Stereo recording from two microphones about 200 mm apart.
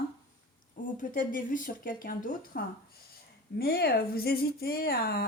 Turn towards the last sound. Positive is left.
turn(degrees=50)  # may be behind; listen again after turning